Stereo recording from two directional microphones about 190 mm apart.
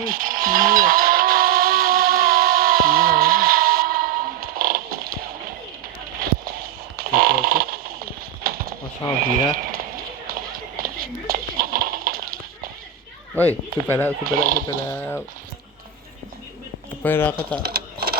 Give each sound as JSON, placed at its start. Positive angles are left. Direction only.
{"t": 0.0, "sound": "music", "side_deg": -45}
{"t": 6.9, "sound": "a sound", "side_deg": -50}
{"t": 9.2, "sound": "speech", "side_deg": -50}
{"t": 10.2, "sound": "a sound", "side_deg": -50}
{"t": 13.3, "sound": "speech", "side_deg": 10}
{"t": 14.3, "sound": "speech", "side_deg": -50}
{"t": 14.9, "sound": "speech", "side_deg": 10}
{"t": 17.0, "sound": "speech", "side_deg": 10}
{"t": 17.6, "sound": "a sound", "side_deg": -55}